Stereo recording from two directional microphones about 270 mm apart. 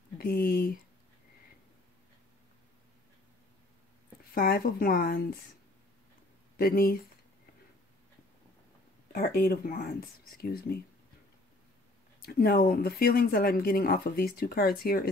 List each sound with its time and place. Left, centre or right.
0.2 s speech: left
4.2 s speech: left
6.5 s speech: left
9.1 s speech: left
12.2 s speech: left